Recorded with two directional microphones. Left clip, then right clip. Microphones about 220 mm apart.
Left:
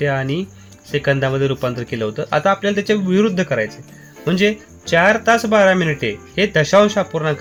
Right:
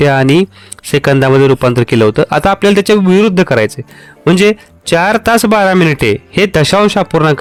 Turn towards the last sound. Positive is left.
turn(degrees=-50)  # may be behind; listen again after turning